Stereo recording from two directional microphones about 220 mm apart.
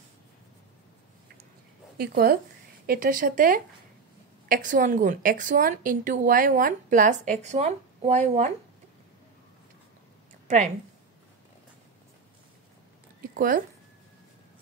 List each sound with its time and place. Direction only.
2.0 s a woman's voice: 45° right (ahead or behind)
13.4 s a woman's voice: 40° right (ahead or behind)